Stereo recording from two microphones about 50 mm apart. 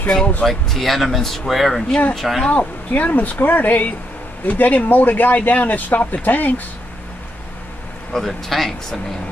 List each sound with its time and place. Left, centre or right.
0.4 s speech: centre
2.5 s speech: left
8.1 s speech: centre